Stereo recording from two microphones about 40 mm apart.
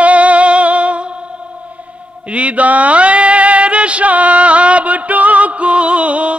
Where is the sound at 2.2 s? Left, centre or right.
Right.